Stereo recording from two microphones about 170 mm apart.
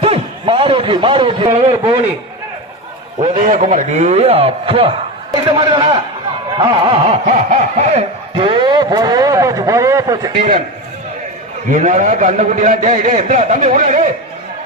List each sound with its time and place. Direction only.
0.0 s a sound: 35° right (ahead or behind)
1.8 s a man's voice: 15° right (ahead or behind)
3.2 s a man's voice: 45° right (ahead or behind); by 10.3 s 20° right (ahead or behind)
11.7 s a man's voice: 50° right (ahead or behind)